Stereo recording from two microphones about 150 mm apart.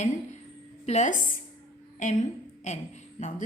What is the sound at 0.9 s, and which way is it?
Speech, 50° left (ahead or behind).